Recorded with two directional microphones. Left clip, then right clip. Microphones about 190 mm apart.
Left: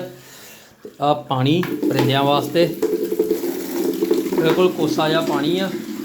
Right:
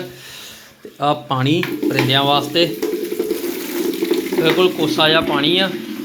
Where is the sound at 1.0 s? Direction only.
15° left (ahead or behind).